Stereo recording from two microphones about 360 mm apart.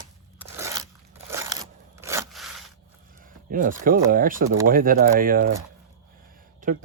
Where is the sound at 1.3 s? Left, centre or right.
Centre.